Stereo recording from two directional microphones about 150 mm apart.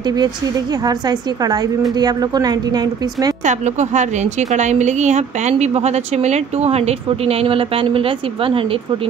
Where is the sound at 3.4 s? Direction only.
50° right (ahead or behind).